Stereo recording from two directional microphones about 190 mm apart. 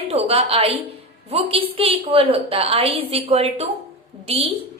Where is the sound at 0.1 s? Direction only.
30° right (ahead or behind).